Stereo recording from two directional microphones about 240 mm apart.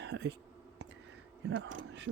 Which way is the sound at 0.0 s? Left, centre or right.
Right.